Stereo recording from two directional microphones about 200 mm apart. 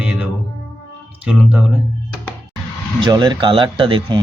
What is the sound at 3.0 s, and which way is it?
Speech, 20° right (ahead or behind).